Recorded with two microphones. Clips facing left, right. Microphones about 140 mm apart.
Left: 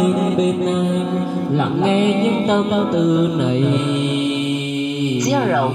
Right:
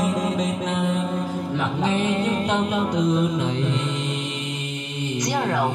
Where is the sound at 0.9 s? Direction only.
55° left (ahead or behind).